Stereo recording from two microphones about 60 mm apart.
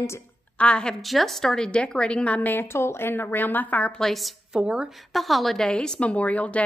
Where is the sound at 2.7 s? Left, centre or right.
Left.